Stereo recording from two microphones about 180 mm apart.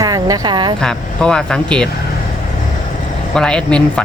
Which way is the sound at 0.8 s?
5° left (ahead or behind).